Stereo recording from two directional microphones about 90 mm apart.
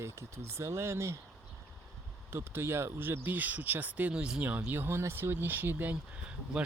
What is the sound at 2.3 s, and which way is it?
Speech, 30° right (ahead or behind).